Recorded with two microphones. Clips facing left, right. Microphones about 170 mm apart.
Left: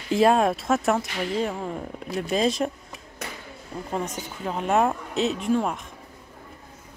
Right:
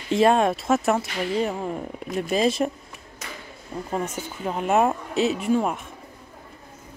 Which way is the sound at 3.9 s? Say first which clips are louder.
Right 1 dB; 5° right (ahead or behind).